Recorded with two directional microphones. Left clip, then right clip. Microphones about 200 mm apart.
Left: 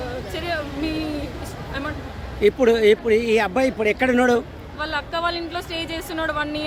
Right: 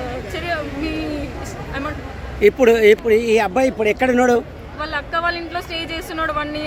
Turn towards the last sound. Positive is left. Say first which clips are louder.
# right 2 dB
turn(degrees=20)  # may be behind; listen again after turning